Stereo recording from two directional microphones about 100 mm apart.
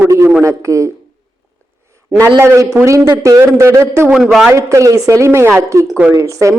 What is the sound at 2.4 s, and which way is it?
A man's voice, 30° right (ahead or behind).